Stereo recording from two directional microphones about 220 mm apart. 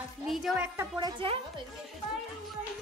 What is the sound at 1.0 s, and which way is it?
Speech, 25° right (ahead or behind).